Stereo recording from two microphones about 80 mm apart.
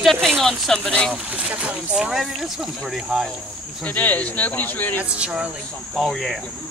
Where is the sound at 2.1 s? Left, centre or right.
Centre.